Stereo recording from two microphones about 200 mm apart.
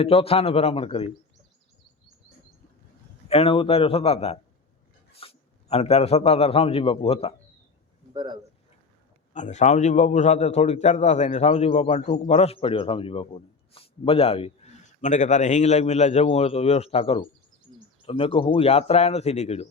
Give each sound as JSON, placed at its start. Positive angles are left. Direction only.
{"t": 0.0, "sound": "speech", "side_deg": 30}
{"t": 3.2, "sound": "a man's voice", "side_deg": 30}
{"t": 8.1, "sound": "speech", "side_deg": -20}
{"t": 9.3, "sound": "a man's voice", "side_deg": 35}